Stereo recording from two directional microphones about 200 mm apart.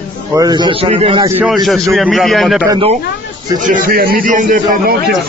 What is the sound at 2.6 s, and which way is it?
Speech, 25° right (ahead or behind).